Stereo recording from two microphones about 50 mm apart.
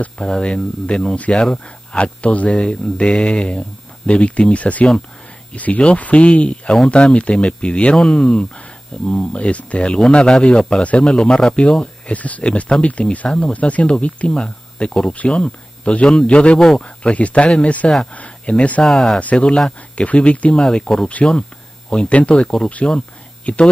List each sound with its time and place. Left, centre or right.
0.2 s speech: centre
11.8 s speech: left; by 16.8 s centre
16.8 s speech: left
18.8 s speech: centre
19.1 s speech: left